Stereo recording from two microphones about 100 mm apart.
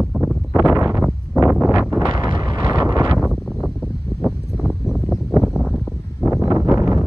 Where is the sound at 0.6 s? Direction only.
35° right (ahead or behind).